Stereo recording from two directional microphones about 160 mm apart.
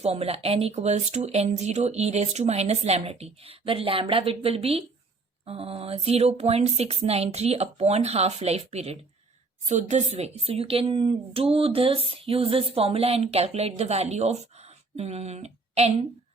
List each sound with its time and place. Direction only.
0.0 s speech: 40° right (ahead or behind)